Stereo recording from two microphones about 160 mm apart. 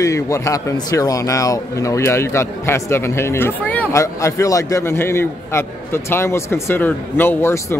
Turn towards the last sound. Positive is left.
turn(degrees=15)  # may be behind; listen again after turning